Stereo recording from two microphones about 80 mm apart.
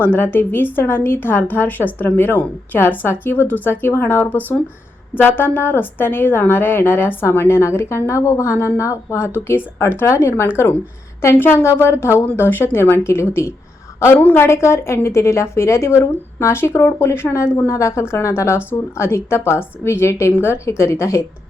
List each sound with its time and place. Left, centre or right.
0.0 s a woman's voice: left